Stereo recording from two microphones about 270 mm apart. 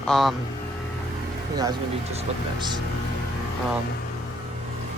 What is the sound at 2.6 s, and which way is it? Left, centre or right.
Speech, centre.